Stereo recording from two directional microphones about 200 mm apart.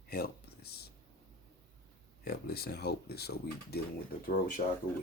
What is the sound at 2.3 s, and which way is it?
Speech, 50° left (ahead or behind).